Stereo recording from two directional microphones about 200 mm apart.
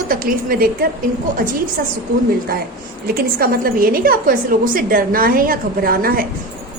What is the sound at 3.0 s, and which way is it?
A woman's voice, 45° right (ahead or behind).